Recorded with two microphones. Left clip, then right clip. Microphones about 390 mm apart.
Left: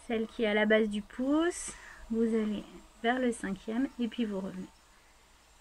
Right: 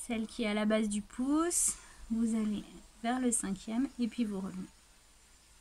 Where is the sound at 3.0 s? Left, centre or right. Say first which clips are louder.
Left 4 dB; right.